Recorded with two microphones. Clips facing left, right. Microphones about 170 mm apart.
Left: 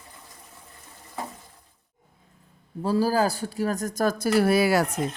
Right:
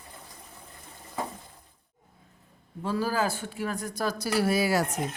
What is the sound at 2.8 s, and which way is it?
Speech, 35° left (ahead or behind).